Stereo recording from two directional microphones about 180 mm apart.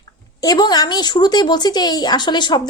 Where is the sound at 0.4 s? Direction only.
20° left (ahead or behind).